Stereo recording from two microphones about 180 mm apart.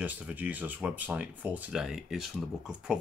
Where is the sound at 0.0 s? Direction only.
10° right (ahead or behind).